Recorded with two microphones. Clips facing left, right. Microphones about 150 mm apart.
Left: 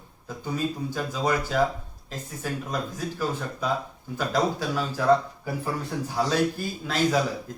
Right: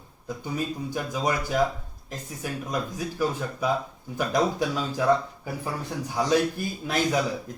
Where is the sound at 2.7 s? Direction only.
10° right (ahead or behind).